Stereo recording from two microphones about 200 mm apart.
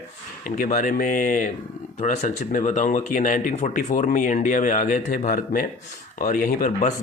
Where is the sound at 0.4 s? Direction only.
40° left (ahead or behind).